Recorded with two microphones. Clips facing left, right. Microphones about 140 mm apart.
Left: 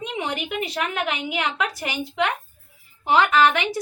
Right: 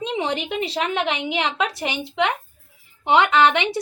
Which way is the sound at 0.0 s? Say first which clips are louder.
Right 4 dB; 25° right (ahead or behind).